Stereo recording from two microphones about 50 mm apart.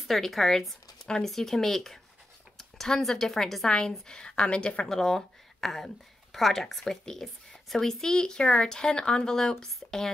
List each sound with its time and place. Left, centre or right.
0.0 s speech: centre
3.6 s speech: centre
4.8 s speech: centre